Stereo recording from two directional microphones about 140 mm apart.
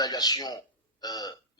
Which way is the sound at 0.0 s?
30° left (ahead or behind).